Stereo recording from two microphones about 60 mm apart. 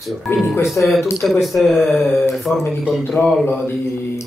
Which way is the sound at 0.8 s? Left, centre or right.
Left.